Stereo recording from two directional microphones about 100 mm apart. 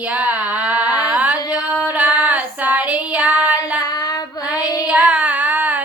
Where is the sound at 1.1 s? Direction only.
15° right (ahead or behind).